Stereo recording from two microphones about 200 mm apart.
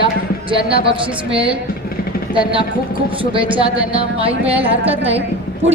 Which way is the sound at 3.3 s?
25° right (ahead or behind).